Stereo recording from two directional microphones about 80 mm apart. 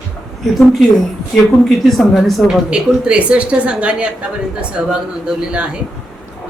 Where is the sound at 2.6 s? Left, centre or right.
Centre.